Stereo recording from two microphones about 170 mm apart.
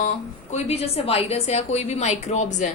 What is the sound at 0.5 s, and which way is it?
A woman's voice, 40° left (ahead or behind).